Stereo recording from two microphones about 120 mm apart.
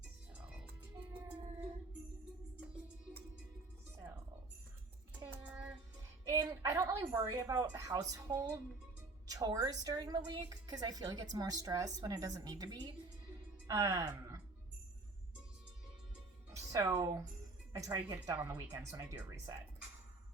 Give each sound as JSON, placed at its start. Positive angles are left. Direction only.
{"t": 0.3, "sound": "music", "side_deg": -10}
{"t": 4.0, "sound": "music", "side_deg": -25}
{"t": 5.2, "sound": "music", "side_deg": -10}
{"t": 6.2, "sound": "a woman's voice", "side_deg": -25}
{"t": 16.5, "sound": "a woman's voice", "side_deg": -25}